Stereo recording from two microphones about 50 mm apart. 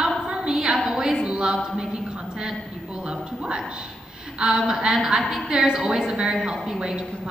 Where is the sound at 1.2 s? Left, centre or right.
Centre.